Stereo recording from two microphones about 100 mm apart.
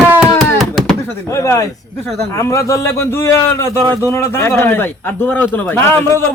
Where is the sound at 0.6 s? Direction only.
Centre (ahead or behind).